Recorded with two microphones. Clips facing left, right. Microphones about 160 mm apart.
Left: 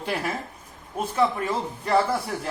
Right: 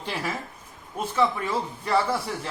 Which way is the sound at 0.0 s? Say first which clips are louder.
Left 3 dB; 55° left (ahead or behind).